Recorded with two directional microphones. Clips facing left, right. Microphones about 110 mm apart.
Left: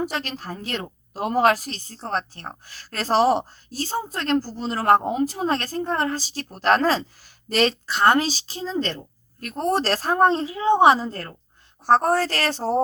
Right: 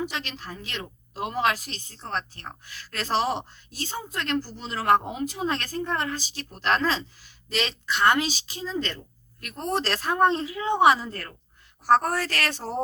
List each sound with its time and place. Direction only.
0.0 s a woman's voice: 45° left (ahead or behind)